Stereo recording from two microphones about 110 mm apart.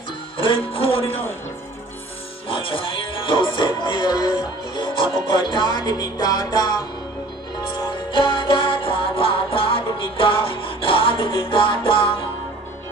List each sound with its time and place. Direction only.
0.4 s music: 55° left (ahead or behind)
2.4 s music: 50° left (ahead or behind)
8.2 s music: 50° left (ahead or behind)